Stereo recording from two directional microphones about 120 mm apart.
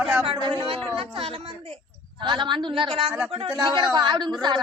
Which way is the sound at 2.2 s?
40° right (ahead or behind).